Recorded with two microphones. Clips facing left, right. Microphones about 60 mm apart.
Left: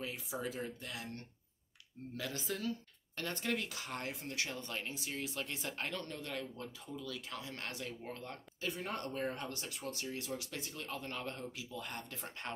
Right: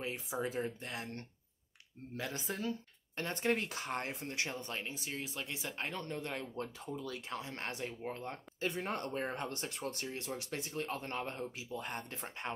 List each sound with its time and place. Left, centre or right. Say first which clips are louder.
0.0 s speech: right 3 dB; right